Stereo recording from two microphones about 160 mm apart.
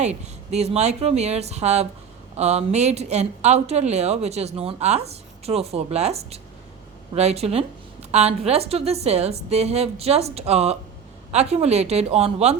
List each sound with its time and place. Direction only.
0.0 s a woman's voice: 45° right (ahead or behind)